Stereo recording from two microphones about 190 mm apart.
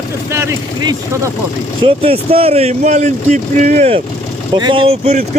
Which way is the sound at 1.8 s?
30° right (ahead or behind).